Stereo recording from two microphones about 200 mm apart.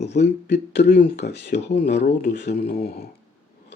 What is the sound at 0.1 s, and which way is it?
Speech, 60° left (ahead or behind).